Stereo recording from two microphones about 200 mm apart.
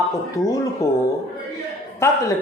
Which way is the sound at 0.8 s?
15° left (ahead or behind).